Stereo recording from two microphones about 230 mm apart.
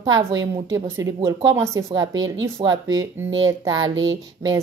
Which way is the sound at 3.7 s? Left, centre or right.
Right.